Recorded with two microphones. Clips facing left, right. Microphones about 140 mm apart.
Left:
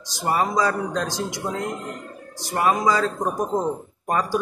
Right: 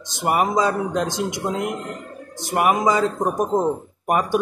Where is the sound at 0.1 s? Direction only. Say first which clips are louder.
Right 3 dB; 20° right (ahead or behind).